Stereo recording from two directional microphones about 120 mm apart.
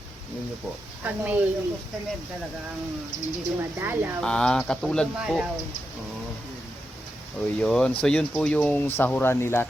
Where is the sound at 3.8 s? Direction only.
20° right (ahead or behind).